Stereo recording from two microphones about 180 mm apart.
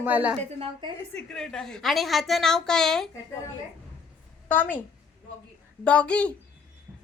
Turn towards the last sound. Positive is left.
turn(degrees=5)  # may be behind; listen again after turning